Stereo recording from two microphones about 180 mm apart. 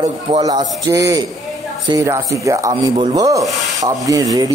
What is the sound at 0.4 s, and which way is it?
Speech, 25° right (ahead or behind).